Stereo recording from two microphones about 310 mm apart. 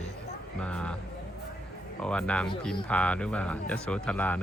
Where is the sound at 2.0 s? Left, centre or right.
Centre.